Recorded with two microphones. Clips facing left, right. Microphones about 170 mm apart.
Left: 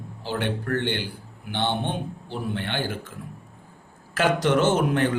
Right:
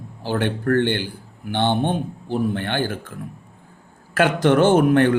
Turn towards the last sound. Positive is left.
turn(degrees=-60)  # may be behind; listen again after turning